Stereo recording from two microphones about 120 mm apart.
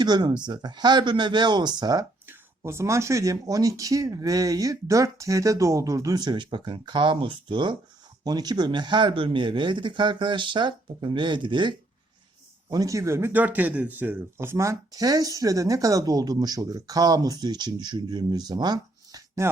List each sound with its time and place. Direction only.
0.0 s speech: 35° right (ahead or behind)
2.2 s speech: 20° right (ahead or behind); by 11.7 s 40° right (ahead or behind)
12.7 s speech: 30° right (ahead or behind)
19.4 s speech: 20° right (ahead or behind)